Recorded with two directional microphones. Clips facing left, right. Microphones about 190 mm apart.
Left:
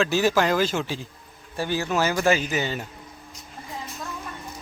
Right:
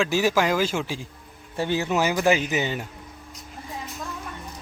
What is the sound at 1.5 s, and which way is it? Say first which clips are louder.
Speech: right 1 dB; 20° right (ahead or behind).